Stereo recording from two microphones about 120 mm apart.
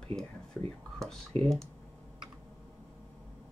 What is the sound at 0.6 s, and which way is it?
Speech, 20° left (ahead or behind).